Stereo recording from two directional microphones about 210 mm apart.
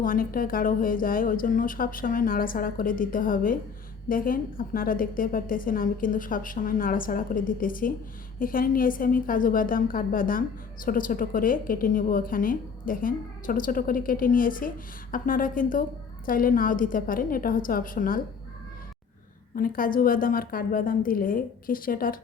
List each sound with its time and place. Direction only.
0.0 s a woman's voice: 40° left (ahead or behind)
19.5 s a woman's voice: 40° left (ahead or behind)